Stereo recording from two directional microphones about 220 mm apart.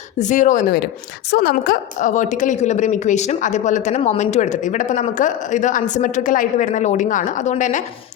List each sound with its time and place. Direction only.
0.2 s a woman's voice: 35° left (ahead or behind)